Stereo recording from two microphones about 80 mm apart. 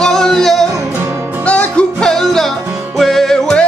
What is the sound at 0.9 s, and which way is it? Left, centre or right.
Music, right.